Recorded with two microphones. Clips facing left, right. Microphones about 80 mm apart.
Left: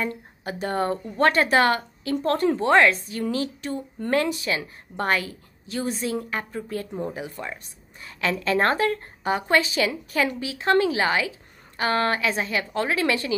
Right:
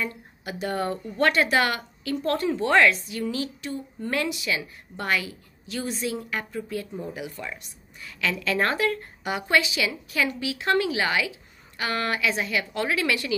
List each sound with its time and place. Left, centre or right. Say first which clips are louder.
0.0 s a woman's voice: left 3 dB; left